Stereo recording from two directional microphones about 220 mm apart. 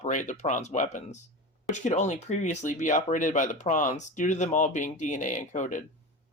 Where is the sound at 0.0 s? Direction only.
35° left (ahead or behind).